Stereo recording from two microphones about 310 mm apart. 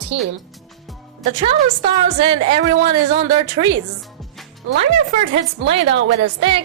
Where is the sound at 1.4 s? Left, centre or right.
Centre.